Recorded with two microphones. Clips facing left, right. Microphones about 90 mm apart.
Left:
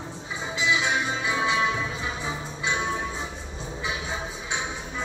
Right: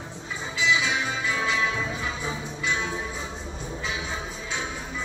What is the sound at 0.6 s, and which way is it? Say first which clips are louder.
Music: even; 20° left (ahead or behind).